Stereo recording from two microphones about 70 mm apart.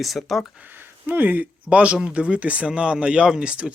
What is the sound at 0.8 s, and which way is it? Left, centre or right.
Speech, right.